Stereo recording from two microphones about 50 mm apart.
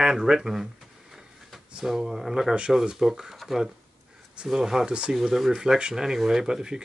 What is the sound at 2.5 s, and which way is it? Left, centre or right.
Speech, centre.